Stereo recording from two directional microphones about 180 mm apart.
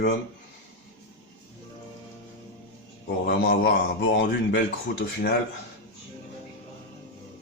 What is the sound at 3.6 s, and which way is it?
Speech, 90° left.